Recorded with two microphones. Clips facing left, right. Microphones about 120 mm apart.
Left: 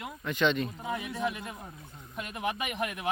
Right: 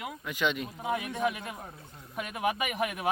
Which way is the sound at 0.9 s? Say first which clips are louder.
Right 4 dB; 55° right (ahead or behind).